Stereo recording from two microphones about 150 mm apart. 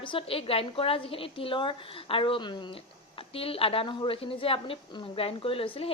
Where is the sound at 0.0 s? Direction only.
35° left (ahead or behind).